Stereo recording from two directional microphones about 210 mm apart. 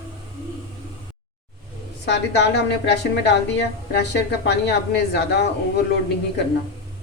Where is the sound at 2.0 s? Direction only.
55° left (ahead or behind).